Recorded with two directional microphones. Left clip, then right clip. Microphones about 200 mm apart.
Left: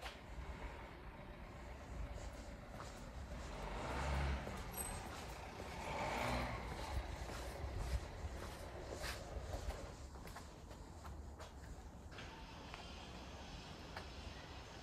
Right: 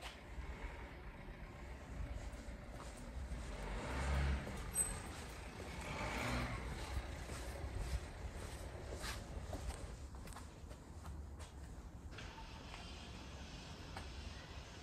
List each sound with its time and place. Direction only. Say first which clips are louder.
3.6 s vehicle: left 1 dB; 30° left (ahead or behind); by 7.1 s 50° left (ahead or behind)